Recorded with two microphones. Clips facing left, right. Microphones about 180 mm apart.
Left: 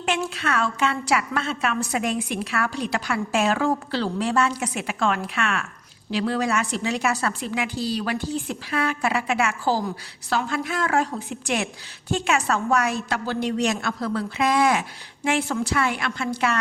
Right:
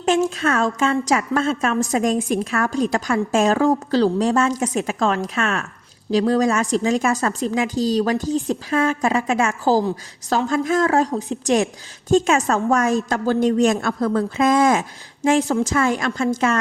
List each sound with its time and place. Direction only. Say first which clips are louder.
0.0 s a woman's voice: right 7 dB; 40° right (ahead or behind)